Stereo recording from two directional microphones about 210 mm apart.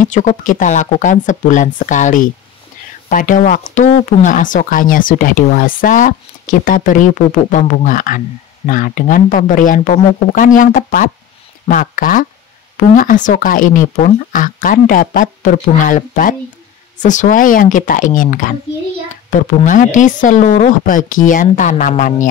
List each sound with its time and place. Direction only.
0.0 s speech: 35° left (ahead or behind)
19.6 s speech: 35° left (ahead or behind)